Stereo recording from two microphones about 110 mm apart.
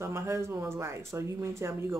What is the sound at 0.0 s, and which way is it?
Speech, 25° right (ahead or behind).